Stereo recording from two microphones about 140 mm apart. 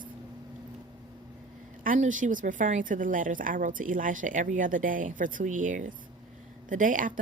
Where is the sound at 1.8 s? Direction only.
70° right (ahead or behind).